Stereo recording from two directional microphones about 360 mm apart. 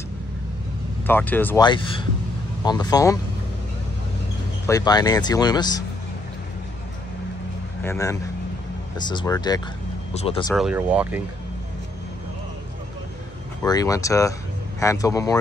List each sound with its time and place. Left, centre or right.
1.0 s speech: centre
4.6 s speech: centre
7.8 s speech: centre
10.5 s speech: centre
13.6 s speech: centre